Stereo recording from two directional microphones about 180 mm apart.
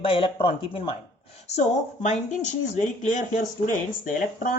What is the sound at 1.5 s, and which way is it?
A woman's voice, 40° left (ahead or behind).